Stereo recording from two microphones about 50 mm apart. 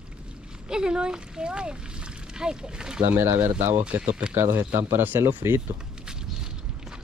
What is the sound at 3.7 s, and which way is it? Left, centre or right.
Speech, right.